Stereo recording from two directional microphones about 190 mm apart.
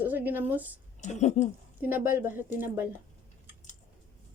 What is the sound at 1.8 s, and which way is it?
Speech, 10° right (ahead or behind).